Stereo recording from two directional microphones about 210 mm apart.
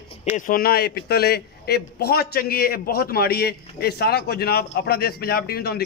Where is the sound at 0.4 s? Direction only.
45° left (ahead or behind).